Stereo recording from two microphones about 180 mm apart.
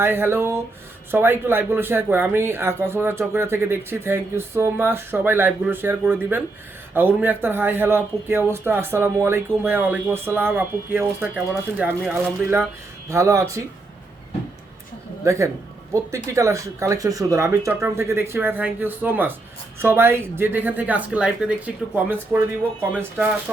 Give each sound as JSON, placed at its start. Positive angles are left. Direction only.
{"t": 0.0, "sound": "speech", "side_deg": -10}
{"t": 15.2, "sound": "speech", "side_deg": -15}